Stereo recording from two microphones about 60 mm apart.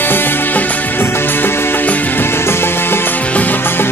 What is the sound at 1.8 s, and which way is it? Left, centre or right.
Music, left.